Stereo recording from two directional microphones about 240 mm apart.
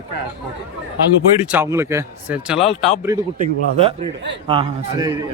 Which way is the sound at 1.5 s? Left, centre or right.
Centre.